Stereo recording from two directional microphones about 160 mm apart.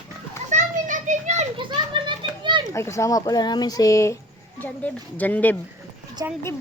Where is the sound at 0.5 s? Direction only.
50° right (ahead or behind).